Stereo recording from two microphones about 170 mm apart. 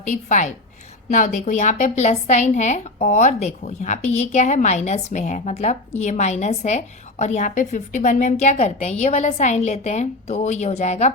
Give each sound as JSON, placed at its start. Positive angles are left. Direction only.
{"t": 0.0, "sound": "a woman's voice", "side_deg": 45}